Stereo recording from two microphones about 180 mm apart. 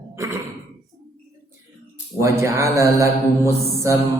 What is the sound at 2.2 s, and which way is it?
A woman's voice, 15° right (ahead or behind).